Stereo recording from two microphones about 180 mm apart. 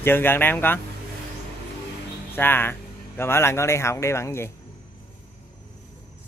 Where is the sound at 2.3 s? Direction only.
10° left (ahead or behind).